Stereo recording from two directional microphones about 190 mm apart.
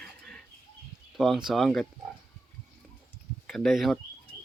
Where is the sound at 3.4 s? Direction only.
Centre (ahead or behind).